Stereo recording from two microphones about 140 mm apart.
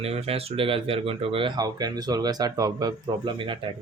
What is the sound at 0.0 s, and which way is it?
Speech, 45° right (ahead or behind).